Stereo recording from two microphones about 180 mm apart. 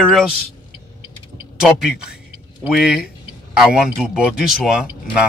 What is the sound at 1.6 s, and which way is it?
Speech, 5° right (ahead or behind).